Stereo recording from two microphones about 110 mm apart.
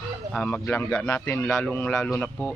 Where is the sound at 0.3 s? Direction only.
15° left (ahead or behind).